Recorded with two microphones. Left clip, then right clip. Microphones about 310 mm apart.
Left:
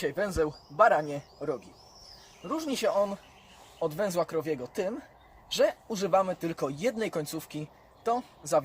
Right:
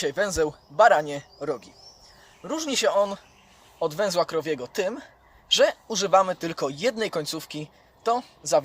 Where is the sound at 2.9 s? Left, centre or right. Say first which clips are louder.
Right 5 dB; right.